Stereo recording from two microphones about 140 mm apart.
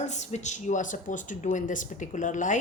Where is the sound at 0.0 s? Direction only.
55° left (ahead or behind).